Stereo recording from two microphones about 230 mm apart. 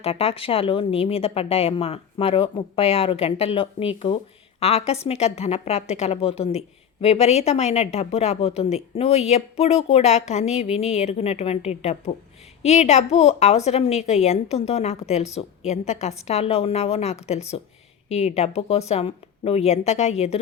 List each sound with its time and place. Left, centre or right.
0.0 s a woman's voice: left